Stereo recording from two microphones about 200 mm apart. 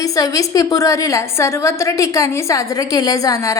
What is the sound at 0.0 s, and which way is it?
A woman's voice, 15° left (ahead or behind).